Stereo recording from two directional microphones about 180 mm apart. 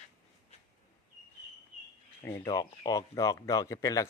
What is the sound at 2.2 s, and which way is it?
Speech, 15° left (ahead or behind).